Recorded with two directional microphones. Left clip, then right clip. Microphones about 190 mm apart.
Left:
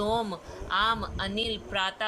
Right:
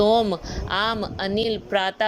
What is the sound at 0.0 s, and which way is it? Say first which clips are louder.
A woman's voice: right 10 dB; 30° right (ahead or behind).